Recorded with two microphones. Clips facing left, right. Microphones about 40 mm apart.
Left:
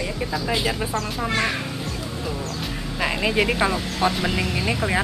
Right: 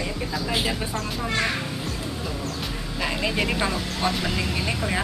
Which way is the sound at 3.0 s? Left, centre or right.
Centre.